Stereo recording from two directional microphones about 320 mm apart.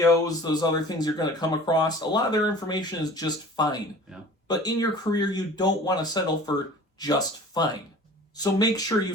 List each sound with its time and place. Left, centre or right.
0.0 s speech: centre